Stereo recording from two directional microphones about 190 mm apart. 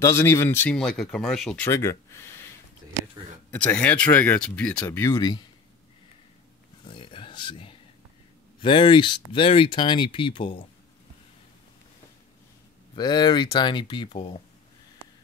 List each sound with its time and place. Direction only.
0.0 s speech: 15° left (ahead or behind)
1.7 s speech: 15° left (ahead or behind)
3.5 s speech: 5° left (ahead or behind)
5.1 s speech: 20° left (ahead or behind)
6.8 s a sound: 25° left (ahead or behind)
8.5 s speech: 25° left (ahead or behind)
12.9 s speech: 20° left (ahead or behind)